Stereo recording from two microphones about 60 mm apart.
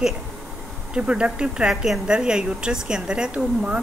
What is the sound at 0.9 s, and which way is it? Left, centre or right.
A woman's voice, centre.